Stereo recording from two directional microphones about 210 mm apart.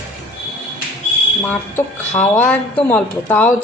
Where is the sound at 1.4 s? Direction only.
10° left (ahead or behind).